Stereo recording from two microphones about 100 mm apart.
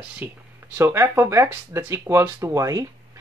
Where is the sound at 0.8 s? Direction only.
25° right (ahead or behind).